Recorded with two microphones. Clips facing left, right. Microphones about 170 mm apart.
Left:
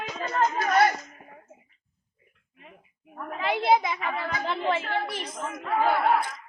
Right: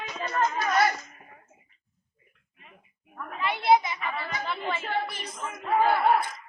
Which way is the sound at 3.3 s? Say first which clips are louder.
Even; 90° left.